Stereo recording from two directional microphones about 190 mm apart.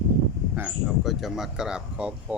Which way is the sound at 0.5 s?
5° right (ahead or behind).